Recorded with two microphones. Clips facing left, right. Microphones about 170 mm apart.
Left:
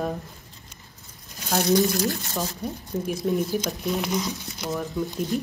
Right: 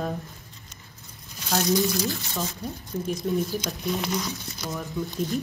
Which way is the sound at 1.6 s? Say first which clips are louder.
Left 3 dB; 60° left (ahead or behind).